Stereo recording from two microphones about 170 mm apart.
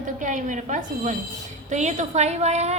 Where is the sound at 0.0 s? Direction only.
50° right (ahead or behind).